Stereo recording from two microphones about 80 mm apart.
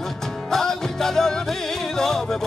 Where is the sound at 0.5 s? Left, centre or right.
Centre.